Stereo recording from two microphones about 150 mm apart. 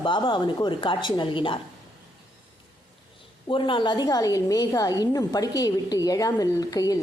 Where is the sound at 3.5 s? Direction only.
35° left (ahead or behind).